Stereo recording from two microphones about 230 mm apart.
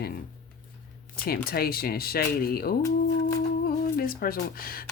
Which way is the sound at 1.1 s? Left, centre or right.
Left.